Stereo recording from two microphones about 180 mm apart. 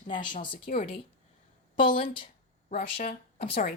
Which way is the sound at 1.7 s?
30° left (ahead or behind).